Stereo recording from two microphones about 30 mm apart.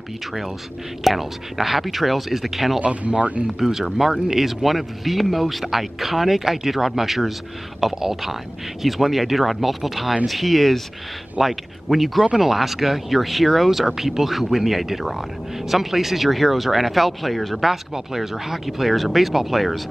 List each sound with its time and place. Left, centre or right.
1.0 s speech: centre
2.8 s speech: right
3.4 s speech: centre
17.6 s speech: centre